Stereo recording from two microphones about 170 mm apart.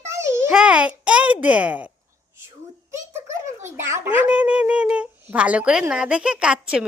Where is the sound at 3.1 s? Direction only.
15° right (ahead or behind).